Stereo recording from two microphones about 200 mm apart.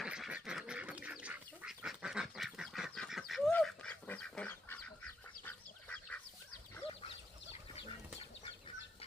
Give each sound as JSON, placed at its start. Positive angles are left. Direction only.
{"t": 0.0, "sound": "duck", "side_deg": -5}
{"t": 7.8, "sound": "bird flight", "side_deg": 30}